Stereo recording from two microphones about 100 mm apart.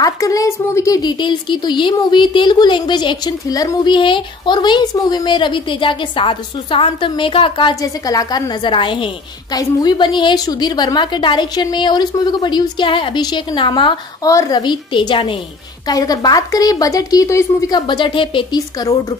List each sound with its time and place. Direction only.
0.0 s speech: 35° left (ahead or behind)
1.0 s a woman's voice: 50° left (ahead or behind)
3.9 s a woman's voice: 55° left (ahead or behind)
7.8 s a woman's voice: 40° left (ahead or behind); by 9.1 s 55° left (ahead or behind)
9.5 s a woman's voice: 40° left (ahead or behind)
14.2 s a woman's voice: 40° left (ahead or behind); by 15.3 s 55° left (ahead or behind)
15.9 s speech: 40° left (ahead or behind); by 18.6 s 55° left (ahead or behind)
18.8 s speech: 35° left (ahead or behind)